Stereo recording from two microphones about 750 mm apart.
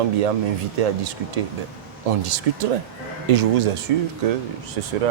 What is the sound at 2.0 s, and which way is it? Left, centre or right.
A man's voice, right.